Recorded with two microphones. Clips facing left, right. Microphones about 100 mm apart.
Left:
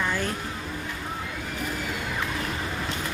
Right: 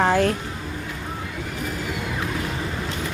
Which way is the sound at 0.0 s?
85° right.